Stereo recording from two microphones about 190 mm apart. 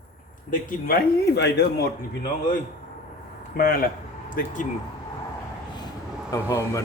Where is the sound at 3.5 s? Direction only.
50° left (ahead or behind).